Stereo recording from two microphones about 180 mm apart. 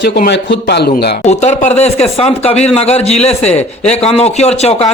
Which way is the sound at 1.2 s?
40° left (ahead or behind).